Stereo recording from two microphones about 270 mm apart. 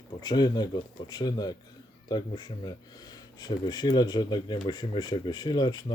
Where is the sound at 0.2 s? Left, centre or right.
Centre.